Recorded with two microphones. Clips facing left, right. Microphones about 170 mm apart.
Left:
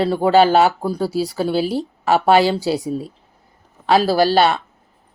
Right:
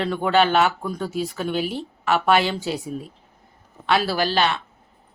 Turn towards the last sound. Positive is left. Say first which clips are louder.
# left 7 dB
turn(degrees=40)  # may be behind; listen again after turning